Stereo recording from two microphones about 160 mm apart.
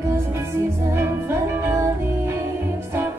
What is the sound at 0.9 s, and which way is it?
Music, 15° right (ahead or behind).